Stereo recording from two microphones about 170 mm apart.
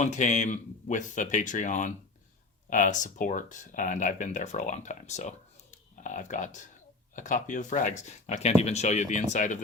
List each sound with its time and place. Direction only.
0.0 s speech: 45° left (ahead or behind)